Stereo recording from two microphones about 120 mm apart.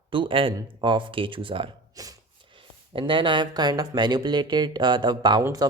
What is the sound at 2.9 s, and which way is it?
Speech, 45° right (ahead or behind).